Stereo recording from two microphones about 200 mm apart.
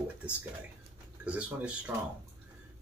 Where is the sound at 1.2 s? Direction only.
5° right (ahead or behind).